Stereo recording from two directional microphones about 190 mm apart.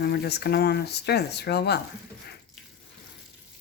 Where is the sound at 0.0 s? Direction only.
60° left (ahead or behind).